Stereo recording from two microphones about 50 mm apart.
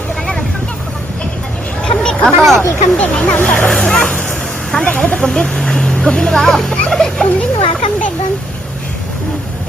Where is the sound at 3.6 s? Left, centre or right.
Centre.